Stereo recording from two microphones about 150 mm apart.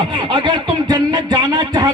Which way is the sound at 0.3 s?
35° right (ahead or behind).